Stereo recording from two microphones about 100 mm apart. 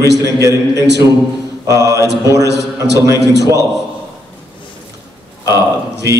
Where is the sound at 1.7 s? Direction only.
35° right (ahead or behind).